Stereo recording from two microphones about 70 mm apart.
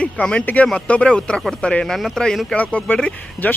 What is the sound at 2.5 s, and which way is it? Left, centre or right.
Speech, centre.